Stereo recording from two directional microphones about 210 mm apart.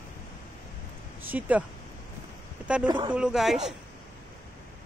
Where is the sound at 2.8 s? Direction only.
20° right (ahead or behind).